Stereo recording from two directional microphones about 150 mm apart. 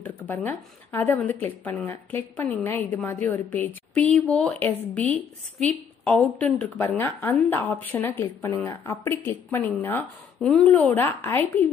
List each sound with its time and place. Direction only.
0.0 s a woman's voice: 10° left (ahead or behind)